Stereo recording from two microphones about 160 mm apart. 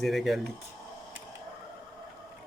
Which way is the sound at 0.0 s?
Centre (ahead or behind).